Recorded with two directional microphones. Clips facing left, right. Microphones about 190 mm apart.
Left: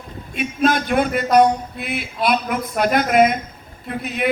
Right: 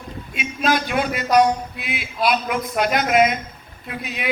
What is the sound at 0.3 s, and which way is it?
Speech, 55° left (ahead or behind).